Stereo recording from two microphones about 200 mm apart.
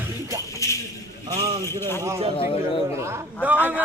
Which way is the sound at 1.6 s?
10° left (ahead or behind).